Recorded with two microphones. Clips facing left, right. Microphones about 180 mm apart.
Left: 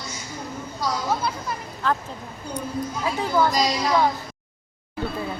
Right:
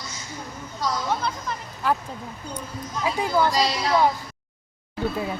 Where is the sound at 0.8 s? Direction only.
10° left (ahead or behind).